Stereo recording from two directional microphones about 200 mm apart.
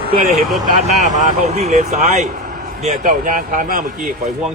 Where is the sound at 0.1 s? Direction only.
45° right (ahead or behind).